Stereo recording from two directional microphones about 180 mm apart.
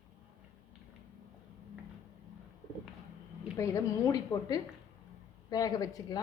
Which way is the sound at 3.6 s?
15° left (ahead or behind).